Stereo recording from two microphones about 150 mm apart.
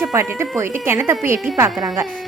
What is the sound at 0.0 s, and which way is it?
A woman's voice, 20° right (ahead or behind).